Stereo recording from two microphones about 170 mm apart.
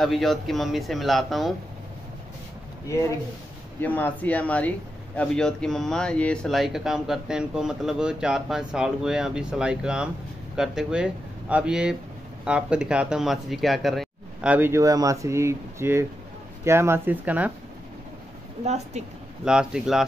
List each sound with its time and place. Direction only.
0.0 s speech: centre (ahead or behind)
3.8 s speech: 10° left (ahead or behind); by 17.5 s 10° right (ahead or behind)
18.6 s a woman's voice: 40° right (ahead or behind)
19.4 s speech: 5° right (ahead or behind)